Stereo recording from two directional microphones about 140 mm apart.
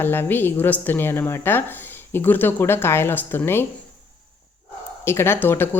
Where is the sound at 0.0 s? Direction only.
15° left (ahead or behind).